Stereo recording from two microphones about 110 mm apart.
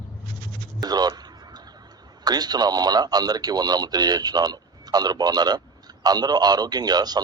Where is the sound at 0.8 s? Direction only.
40° right (ahead or behind).